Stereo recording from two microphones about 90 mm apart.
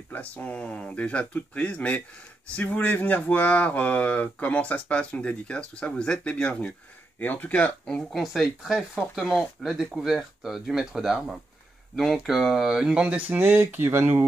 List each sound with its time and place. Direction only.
0.1 s speech: 20° left (ahead or behind)
7.8 s speech: centre (ahead or behind); by 14.2 s 30° right (ahead or behind)